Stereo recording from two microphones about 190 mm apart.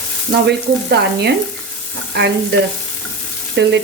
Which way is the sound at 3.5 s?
65° right (ahead or behind).